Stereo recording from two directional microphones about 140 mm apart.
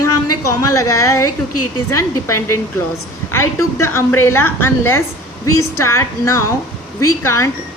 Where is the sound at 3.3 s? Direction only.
20° left (ahead or behind).